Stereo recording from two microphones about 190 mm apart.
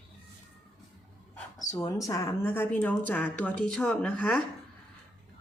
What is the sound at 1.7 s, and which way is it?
Speech, 20° left (ahead or behind).